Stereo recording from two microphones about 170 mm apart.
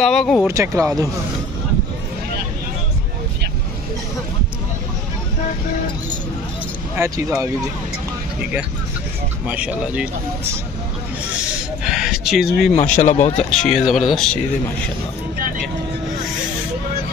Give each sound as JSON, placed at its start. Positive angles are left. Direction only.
{"t": 0.0, "sound": "speech", "side_deg": 5}
{"t": 0.5, "sound": "speech", "side_deg": -15}
{"t": 7.0, "sound": "speech", "side_deg": -20}
{"t": 9.5, "sound": "speech", "side_deg": -10}
{"t": 11.8, "sound": "speech", "side_deg": -5}
{"t": 13.0, "sound": "speech", "side_deg": 40}
{"t": 13.5, "sound": "speech", "side_deg": 0}